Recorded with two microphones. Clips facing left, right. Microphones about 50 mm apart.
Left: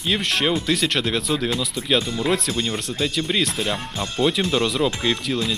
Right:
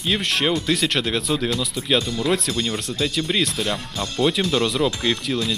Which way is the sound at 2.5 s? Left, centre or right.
Centre.